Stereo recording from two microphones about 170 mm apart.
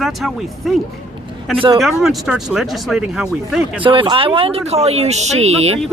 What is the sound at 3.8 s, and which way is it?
Speech, 30° right (ahead or behind).